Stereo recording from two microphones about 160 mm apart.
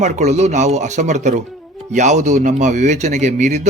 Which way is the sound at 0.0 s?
45° right (ahead or behind).